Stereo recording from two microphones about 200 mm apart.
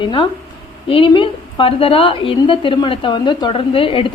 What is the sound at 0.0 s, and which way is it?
A woman's voice, 25° left (ahead or behind).